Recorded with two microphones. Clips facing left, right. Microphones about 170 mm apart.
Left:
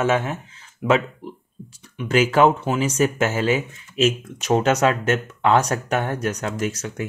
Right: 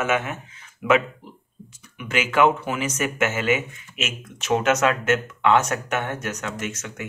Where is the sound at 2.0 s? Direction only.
35° left (ahead or behind).